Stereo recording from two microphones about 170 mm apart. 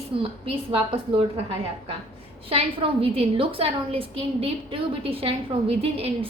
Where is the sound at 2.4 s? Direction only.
35° right (ahead or behind).